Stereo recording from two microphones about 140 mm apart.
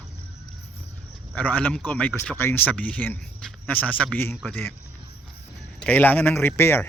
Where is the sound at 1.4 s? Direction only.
10° left (ahead or behind).